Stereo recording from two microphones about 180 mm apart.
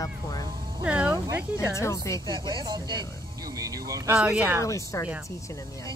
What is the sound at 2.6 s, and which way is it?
Speech, 25° right (ahead or behind).